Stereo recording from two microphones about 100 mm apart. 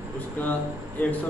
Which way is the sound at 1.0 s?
10° left (ahead or behind).